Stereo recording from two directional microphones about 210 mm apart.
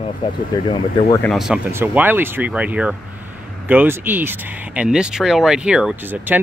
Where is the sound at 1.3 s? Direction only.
Centre (ahead or behind).